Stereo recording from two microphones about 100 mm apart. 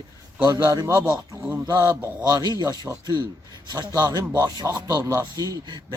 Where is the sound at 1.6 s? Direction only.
35° right (ahead or behind).